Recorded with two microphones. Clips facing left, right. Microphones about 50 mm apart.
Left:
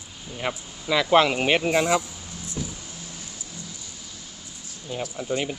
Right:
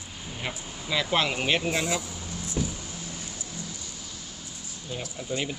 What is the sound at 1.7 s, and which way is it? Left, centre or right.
Speech, left.